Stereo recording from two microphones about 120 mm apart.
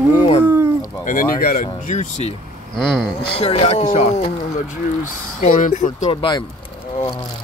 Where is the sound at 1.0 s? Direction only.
90° left.